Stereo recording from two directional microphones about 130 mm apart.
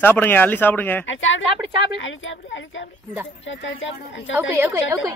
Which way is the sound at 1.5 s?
40° right (ahead or behind).